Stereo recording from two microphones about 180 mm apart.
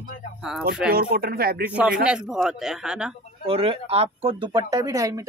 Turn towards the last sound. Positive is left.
turn(degrees=-20)  # may be behind; listen again after turning